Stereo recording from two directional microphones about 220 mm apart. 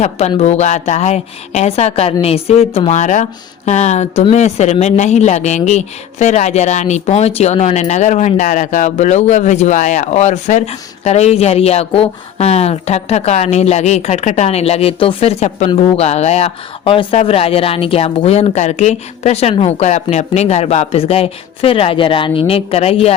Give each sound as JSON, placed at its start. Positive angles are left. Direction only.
{"t": 0.0, "sound": "a woman's voice", "side_deg": 30}